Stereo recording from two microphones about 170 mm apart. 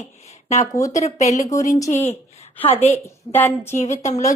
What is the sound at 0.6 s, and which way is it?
Speech, 20° left (ahead or behind).